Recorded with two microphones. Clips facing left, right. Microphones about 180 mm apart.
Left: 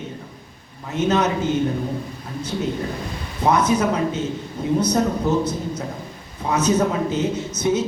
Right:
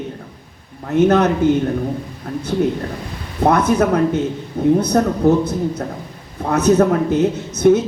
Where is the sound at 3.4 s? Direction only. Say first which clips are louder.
Right 4 dB; 60° right (ahead or behind).